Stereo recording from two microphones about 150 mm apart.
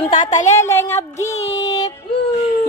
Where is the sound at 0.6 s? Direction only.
15° left (ahead or behind).